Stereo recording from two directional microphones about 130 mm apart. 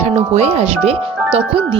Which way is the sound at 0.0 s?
55° right (ahead or behind).